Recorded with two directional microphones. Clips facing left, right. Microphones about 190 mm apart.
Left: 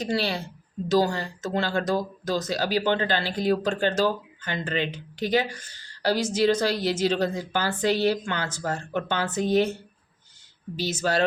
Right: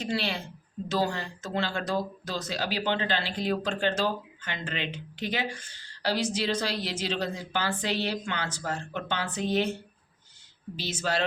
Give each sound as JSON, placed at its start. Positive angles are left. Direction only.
{"t": 0.0, "sound": "a woman's voice", "side_deg": 40}
{"t": 10.8, "sound": "a woman's voice", "side_deg": 40}